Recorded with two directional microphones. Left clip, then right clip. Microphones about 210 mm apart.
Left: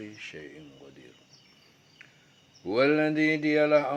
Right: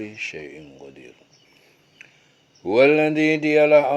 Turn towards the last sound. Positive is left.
turn(degrees=-30)  # may be behind; listen again after turning